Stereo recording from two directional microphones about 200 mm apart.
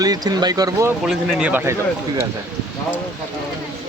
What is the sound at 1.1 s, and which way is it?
Speech, 5° right (ahead or behind).